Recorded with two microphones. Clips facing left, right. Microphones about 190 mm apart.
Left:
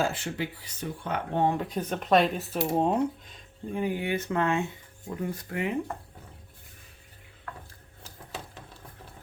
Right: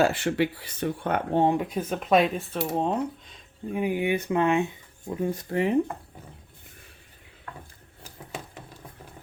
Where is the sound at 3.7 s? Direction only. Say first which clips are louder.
Right 3 dB; 15° right (ahead or behind).